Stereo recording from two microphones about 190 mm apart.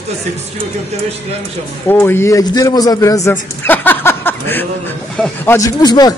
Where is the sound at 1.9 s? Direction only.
10° left (ahead or behind).